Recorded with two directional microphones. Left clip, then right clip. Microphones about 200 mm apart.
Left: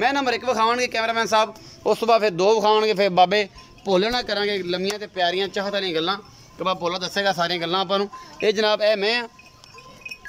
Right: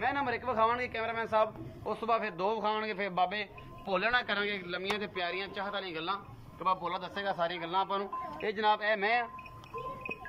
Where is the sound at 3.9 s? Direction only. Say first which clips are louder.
Left 9 dB; 30° left (ahead or behind); by 9.3 s 60° left (ahead or behind).